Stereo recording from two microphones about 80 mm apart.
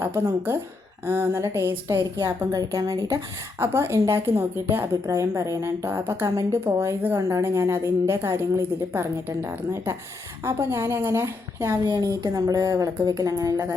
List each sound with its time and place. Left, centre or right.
0.0 s a woman's voice: right
2.5 s speech: right
3.6 s a woman's voice: right
5.0 s a woman's voice: right
11.9 s speech: right